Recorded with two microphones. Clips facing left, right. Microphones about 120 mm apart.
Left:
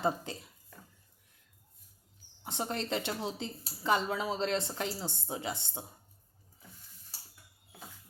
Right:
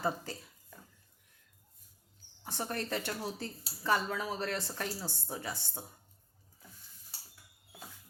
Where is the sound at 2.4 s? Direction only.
20° left (ahead or behind).